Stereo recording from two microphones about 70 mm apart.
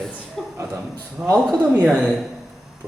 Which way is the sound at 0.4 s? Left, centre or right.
Centre.